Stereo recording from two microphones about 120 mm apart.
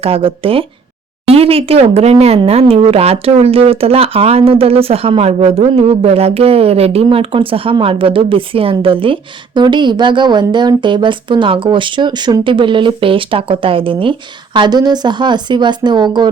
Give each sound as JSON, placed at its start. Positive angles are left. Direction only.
{"t": 0.0, "sound": "a woman's voice", "side_deg": -50}